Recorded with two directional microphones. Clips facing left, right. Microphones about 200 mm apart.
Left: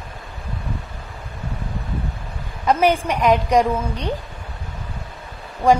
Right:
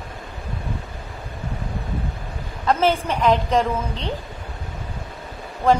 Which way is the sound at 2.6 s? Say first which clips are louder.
Left 2 dB; 15° left (ahead or behind).